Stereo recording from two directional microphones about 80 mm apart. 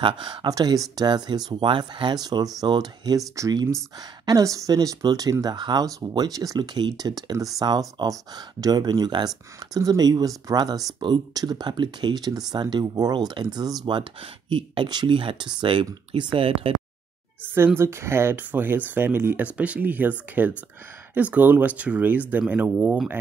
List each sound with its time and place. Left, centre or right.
0.0 s speech: right
0.5 s speech: right
2.2 s speech: right
4.3 s speech: right
5.4 s speech: right
5.9 s speech: right
11.0 s speech: right
11.3 s speech: right
14.5 s speech: right
16.6 s a sound: right
17.7 s speech: right
19.4 s speech: centre